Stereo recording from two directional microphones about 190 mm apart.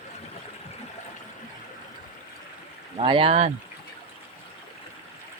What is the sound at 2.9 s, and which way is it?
Speech, 30° right (ahead or behind).